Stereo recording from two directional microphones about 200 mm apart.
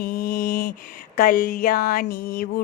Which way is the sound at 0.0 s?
50° left (ahead or behind).